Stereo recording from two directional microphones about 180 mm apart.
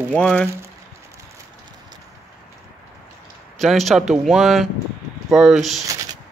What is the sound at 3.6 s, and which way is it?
Speech, centre (ahead or behind).